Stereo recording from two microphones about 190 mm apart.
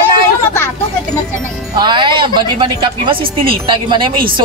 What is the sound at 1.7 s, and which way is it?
Speech, 25° right (ahead or behind).